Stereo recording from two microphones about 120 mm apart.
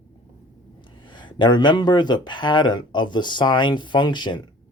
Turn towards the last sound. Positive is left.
turn(degrees=40)  # may be behind; listen again after turning